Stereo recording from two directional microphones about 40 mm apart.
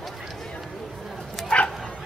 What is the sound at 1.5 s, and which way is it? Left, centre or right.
Bow-wow, left.